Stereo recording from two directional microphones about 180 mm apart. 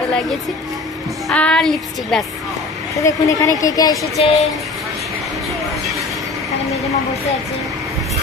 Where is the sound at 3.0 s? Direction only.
20° left (ahead or behind).